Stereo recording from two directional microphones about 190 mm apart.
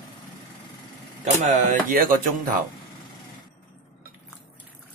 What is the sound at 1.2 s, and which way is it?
Speech, 40° right (ahead or behind).